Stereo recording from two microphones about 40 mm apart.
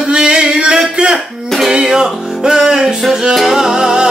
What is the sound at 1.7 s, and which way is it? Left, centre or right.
Music, centre.